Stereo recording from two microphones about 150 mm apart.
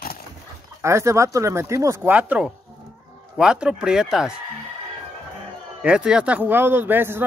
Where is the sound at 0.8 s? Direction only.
20° right (ahead or behind); by 4.3 s 5° right (ahead or behind).